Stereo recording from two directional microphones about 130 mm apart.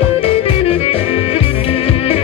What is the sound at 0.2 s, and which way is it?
Music, 50° left (ahead or behind).